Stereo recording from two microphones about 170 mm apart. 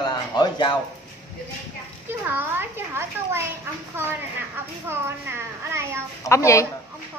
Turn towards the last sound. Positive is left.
turn(degrees=15)  # may be behind; listen again after turning